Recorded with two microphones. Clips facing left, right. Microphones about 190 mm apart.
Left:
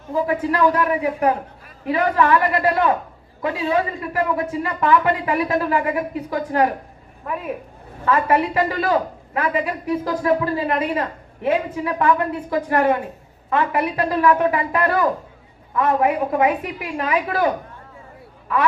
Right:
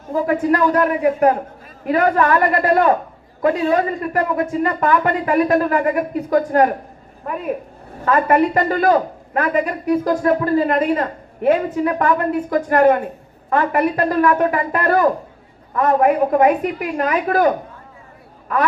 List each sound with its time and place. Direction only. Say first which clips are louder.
0.3 s a man's voice: right 3 dB; 50° right (ahead or behind)
8.0 s a man's voice: right 3 dB; 50° right (ahead or behind)